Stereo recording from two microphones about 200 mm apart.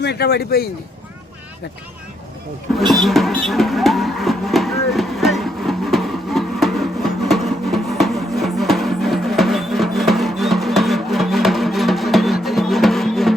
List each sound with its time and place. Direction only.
0.0 s speech: 55° left (ahead or behind)
2.7 s music: centre (ahead or behind)